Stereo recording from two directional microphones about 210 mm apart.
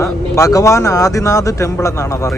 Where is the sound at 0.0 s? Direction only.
15° left (ahead or behind).